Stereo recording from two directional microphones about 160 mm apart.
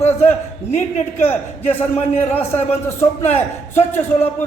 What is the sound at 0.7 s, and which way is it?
A man's voice, 50° left (ahead or behind).